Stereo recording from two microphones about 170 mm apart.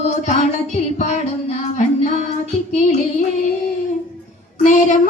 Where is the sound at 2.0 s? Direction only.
45° left (ahead or behind).